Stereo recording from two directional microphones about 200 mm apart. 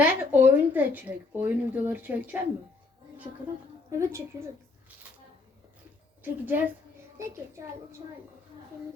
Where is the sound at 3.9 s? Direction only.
15° right (ahead or behind).